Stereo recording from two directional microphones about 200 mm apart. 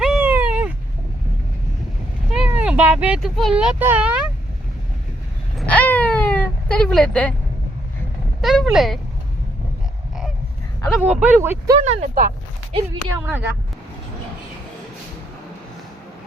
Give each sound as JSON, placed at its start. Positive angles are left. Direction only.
{"t": 0.0, "sound": "cat", "side_deg": -5}
{"t": 2.3, "sound": "a child's voice", "side_deg": -5}
{"t": 5.5, "sound": "a sound", "side_deg": 5}
{"t": 8.4, "sound": "speech", "side_deg": 0}
{"t": 10.9, "sound": "speech", "side_deg": -5}
{"t": 11.8, "sound": "speech", "side_deg": -35}
{"t": 13.2, "sound": "speech", "side_deg": -10}